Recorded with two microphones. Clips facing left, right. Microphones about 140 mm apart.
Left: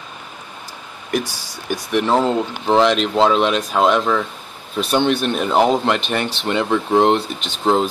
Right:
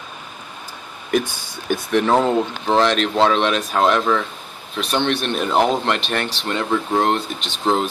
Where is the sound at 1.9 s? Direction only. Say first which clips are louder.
Even; centre (ahead or behind).